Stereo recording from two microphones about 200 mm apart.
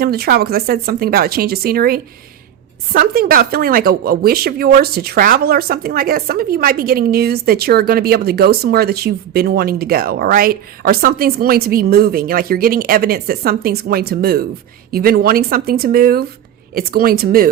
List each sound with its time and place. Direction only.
0.0 s speech: 50° right (ahead or behind)